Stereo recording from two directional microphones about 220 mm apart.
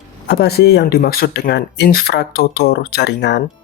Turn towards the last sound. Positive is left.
turn(degrees=50)  # may be behind; listen again after turning